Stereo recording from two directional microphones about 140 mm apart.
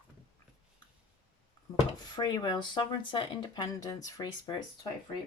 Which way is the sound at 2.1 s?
30° left (ahead or behind).